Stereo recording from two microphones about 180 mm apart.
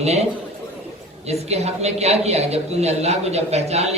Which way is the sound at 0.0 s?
35° right (ahead or behind).